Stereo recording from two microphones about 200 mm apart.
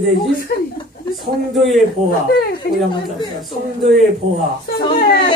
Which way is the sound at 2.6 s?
50° left (ahead or behind).